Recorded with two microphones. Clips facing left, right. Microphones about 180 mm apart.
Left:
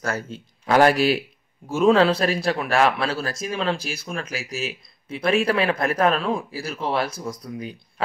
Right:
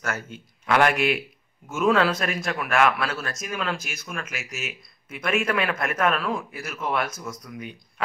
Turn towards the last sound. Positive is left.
turn(degrees=35)  # may be behind; listen again after turning